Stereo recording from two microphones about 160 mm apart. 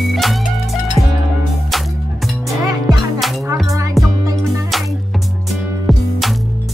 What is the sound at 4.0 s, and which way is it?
Music, centre (ahead or behind).